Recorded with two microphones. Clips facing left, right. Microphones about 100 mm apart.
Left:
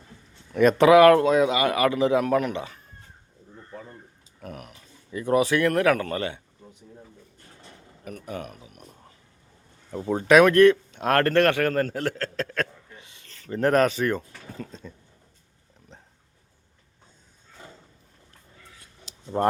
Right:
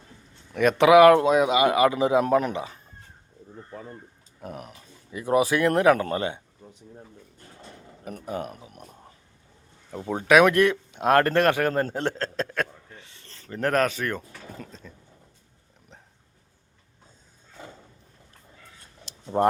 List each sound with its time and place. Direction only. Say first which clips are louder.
0.5 s a man's voice: left 1 dB; 5° right (ahead or behind); by 2.2 s 20° right (ahead or behind)
2.2 s speech: right 1 dB; 30° right (ahead or behind)
4.4 s speech: right 2 dB; 25° right (ahead or behind)
5.1 s a man's voice: even; 15° right (ahead or behind)
8.0 s speech: right 3 dB; 30° right (ahead or behind)
9.9 s speech: left 1 dB; centre (ahead or behind); by 12.6 s 20° right (ahead or behind)
13.0 s a sound: even; 10° left (ahead or behind)
13.2 s a sound: right 1 dB; 35° right (ahead or behind)
13.5 s speech: left 3 dB; centre (ahead or behind)